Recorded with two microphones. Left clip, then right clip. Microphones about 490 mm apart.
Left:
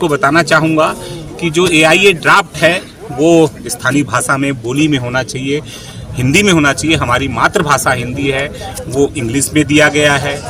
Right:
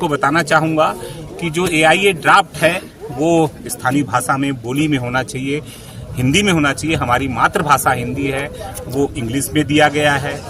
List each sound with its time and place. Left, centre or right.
0.0 s a man's voice: right